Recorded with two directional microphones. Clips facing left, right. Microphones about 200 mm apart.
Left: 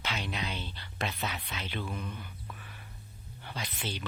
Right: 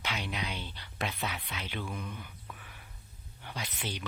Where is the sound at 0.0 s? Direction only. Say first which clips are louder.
Left 1 dB; 10° right (ahead or behind).